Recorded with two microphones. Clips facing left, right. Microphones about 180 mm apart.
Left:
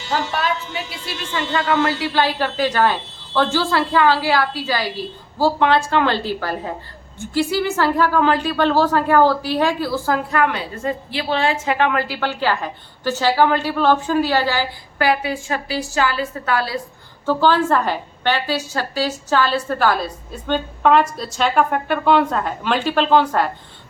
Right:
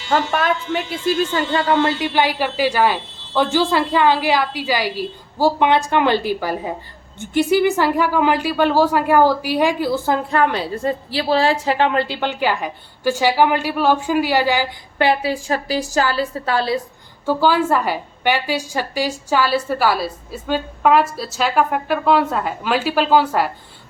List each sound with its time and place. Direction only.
0.1 s a woman's voice: 50° right (ahead or behind); by 10.2 s 20° right (ahead or behind)
10.3 s a woman's voice: 30° right (ahead or behind); by 15.0 s 15° right (ahead or behind)
15.0 s a woman's voice: 30° right (ahead or behind)
17.2 s a woman's voice: 10° right (ahead or behind)